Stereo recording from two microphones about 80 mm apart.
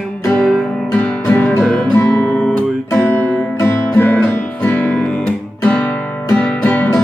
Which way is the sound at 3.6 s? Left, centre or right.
Left.